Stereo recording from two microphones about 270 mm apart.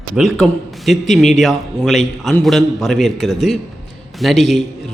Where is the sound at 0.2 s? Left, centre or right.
Centre.